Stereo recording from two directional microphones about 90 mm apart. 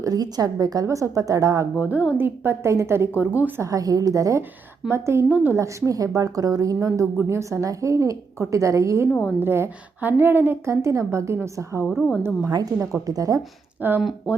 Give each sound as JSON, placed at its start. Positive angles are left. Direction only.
{"t": 0.0, "sound": "a woman's voice", "side_deg": -45}
{"t": 1.8, "sound": "a woman's voice", "side_deg": -20}
{"t": 3.6, "sound": "a woman's voice", "side_deg": -40}
{"t": 5.5, "sound": "a woman's voice", "side_deg": -35}
{"t": 13.8, "sound": "a woman's voice", "side_deg": -20}